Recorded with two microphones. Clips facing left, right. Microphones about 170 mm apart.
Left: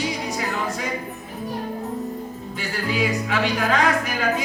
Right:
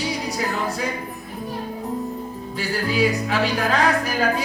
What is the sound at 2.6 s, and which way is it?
Speech, 35° right (ahead or behind).